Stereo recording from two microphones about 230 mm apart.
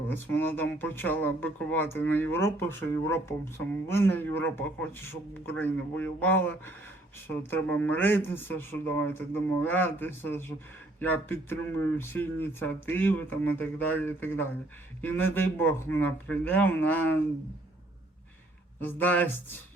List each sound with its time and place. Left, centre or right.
0.1 s speech: centre
18.8 s speech: centre